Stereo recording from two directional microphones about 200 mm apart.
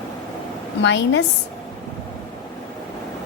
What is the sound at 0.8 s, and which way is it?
Speech, 60° left (ahead or behind).